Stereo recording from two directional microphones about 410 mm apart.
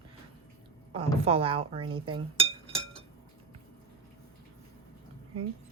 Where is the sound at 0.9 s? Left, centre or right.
Centre.